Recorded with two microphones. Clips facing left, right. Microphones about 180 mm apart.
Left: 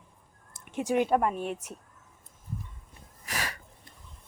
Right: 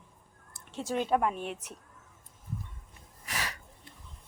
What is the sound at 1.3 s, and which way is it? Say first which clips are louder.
Speech: left 4 dB; 40° left (ahead or behind).